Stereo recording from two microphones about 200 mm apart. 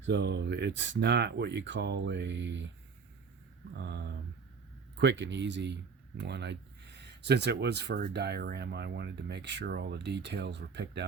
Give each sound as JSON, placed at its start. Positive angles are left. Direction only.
{"t": 0.0, "sound": "speech", "side_deg": -60}
{"t": 3.8, "sound": "speech", "side_deg": -55}